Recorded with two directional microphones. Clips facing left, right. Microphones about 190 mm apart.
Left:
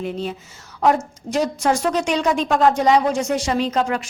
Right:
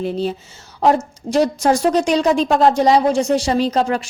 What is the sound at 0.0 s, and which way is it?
A woman's voice, 35° right (ahead or behind).